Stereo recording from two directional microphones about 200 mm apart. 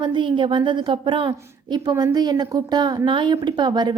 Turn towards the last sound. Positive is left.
turn(degrees=-20)  # may be behind; listen again after turning